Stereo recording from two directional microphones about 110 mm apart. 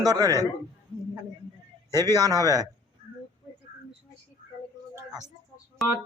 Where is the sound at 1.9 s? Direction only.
35° right (ahead or behind).